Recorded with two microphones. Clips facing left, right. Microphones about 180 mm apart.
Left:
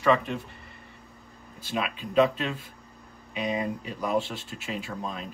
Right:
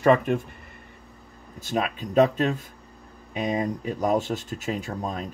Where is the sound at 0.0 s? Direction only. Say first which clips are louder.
Right 4 dB; 50° right (ahead or behind).